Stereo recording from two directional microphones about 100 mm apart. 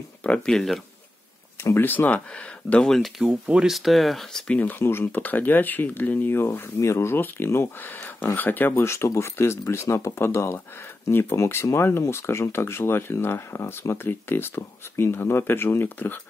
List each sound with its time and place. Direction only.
0.2 s speech: 10° left (ahead or behind)
1.6 s speech: 25° left (ahead or behind); by 3.1 s 5° left (ahead or behind)
3.2 s speech: 10° right (ahead or behind)
4.6 s speech: 20° left (ahead or behind)